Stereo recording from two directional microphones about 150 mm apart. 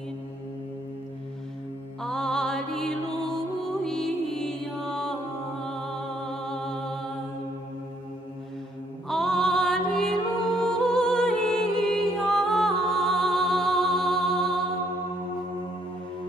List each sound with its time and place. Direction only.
2.0 s music: 5° left (ahead or behind)
9.1 s music: 5° left (ahead or behind)